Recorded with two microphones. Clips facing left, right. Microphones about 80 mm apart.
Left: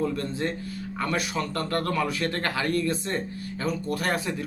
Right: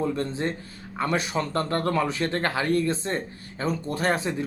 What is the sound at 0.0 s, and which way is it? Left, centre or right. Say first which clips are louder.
Speech: right 1 dB; right.